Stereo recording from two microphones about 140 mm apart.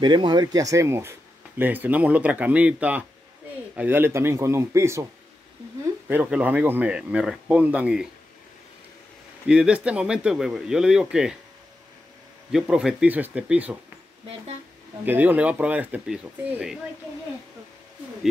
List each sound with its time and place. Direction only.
0.0 s speech: 35° right (ahead or behind)
6.0 s speech: 10° right (ahead or behind)
9.5 s speech: 5° right (ahead or behind)
12.5 s speech: 5° right (ahead or behind)
15.0 s speech: 15° right (ahead or behind)